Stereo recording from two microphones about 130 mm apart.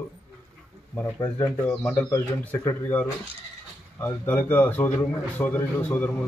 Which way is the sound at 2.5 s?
15° left (ahead or behind).